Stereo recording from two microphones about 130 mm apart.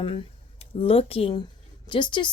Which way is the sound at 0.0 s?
45° left (ahead or behind).